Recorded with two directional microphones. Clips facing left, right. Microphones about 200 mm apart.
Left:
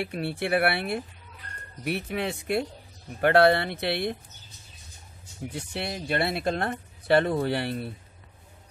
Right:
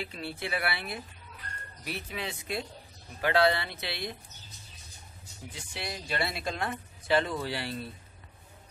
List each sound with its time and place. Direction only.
0.0 s speech: 65° left (ahead or behind)
5.5 s speech: 60° left (ahead or behind)